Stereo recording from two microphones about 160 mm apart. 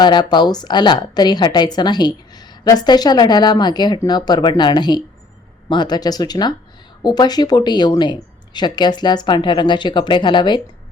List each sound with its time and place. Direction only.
0.0 s a woman's voice: 25° left (ahead or behind)